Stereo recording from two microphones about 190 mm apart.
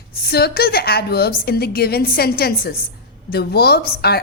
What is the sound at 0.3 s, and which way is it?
A woman's voice, 55° left (ahead or behind).